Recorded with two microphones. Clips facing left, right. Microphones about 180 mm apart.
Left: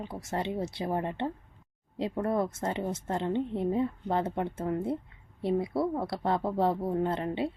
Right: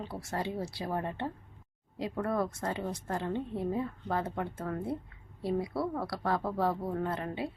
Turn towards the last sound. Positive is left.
turn(degrees=25)  # may be behind; listen again after turning